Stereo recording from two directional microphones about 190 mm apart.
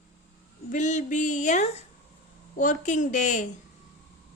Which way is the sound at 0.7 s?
40° left (ahead or behind).